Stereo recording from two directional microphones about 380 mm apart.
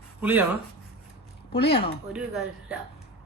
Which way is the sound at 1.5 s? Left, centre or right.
Left.